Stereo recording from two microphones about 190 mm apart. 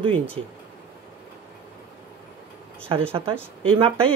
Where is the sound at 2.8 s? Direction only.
30° right (ahead or behind).